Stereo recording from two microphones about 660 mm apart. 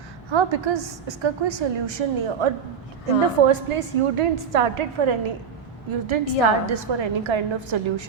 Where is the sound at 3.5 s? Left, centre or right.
Right.